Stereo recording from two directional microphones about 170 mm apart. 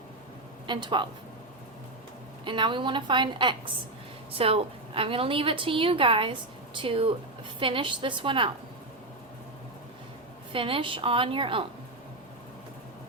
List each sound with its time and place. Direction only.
0.7 s a woman's voice: 25° right (ahead or behind)
2.4 s a woman's voice: 30° right (ahead or behind)
10.5 s a woman's voice: 30° right (ahead or behind)